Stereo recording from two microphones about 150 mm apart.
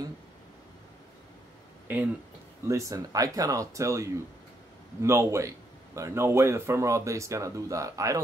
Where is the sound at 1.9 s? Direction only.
10° right (ahead or behind).